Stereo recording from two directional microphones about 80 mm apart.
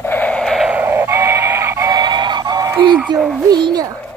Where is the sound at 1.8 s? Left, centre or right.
Right.